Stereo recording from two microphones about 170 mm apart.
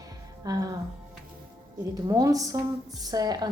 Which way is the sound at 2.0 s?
20° right (ahead or behind).